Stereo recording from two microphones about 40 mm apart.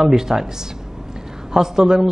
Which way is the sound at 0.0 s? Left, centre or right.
Centre.